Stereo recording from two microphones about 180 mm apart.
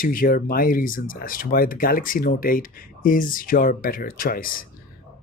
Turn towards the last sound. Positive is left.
turn(degrees=50)  # may be behind; listen again after turning